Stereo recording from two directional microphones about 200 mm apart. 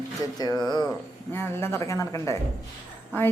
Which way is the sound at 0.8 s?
5° left (ahead or behind).